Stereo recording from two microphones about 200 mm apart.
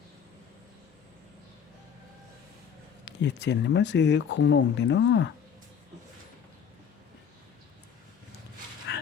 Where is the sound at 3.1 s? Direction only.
60° left (ahead or behind).